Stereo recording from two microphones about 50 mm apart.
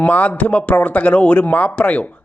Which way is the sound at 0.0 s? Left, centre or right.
Left.